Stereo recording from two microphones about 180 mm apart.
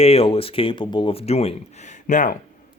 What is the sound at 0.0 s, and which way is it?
Speech, 35° left (ahead or behind).